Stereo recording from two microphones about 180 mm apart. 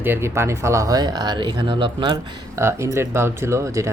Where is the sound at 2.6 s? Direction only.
15° right (ahead or behind).